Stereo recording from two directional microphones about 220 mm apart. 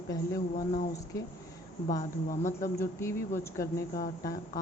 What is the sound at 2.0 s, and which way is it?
A woman's voice, 15° left (ahead or behind).